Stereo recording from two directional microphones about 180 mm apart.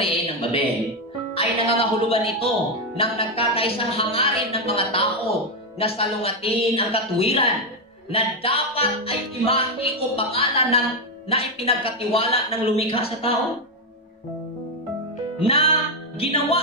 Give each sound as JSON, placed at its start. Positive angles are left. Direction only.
{"t": 0.0, "sound": "a man's voice", "side_deg": 30}
{"t": 3.0, "sound": "music", "side_deg": 30}
{"t": 15.4, "sound": "music", "side_deg": 30}